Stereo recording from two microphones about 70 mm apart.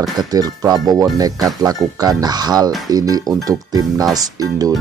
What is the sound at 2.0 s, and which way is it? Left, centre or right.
Speech, right.